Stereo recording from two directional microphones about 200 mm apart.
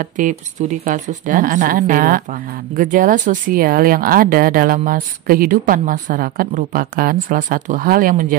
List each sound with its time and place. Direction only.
0.0 s speech: 40° right (ahead or behind)